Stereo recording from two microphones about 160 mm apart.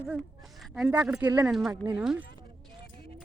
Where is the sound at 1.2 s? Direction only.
25° right (ahead or behind).